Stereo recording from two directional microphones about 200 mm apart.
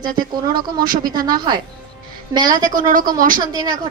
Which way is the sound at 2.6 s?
40° right (ahead or behind).